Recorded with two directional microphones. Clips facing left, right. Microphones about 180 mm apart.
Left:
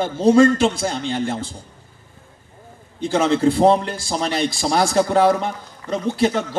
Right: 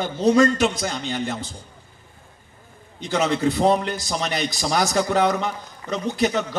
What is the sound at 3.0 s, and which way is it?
A man's voice, 30° left (ahead or behind).